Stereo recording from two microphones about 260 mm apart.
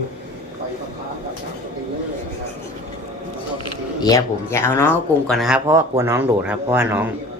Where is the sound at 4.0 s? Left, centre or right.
Centre.